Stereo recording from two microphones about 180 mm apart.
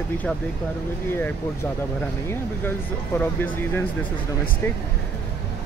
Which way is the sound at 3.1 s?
10° left (ahead or behind).